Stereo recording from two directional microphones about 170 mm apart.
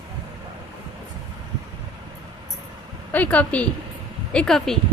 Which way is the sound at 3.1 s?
10° left (ahead or behind).